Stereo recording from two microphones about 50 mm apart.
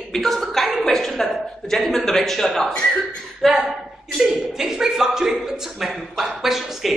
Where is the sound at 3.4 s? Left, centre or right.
Centre.